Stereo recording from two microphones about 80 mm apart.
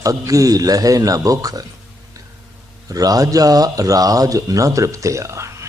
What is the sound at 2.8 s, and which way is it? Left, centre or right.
Speech, right.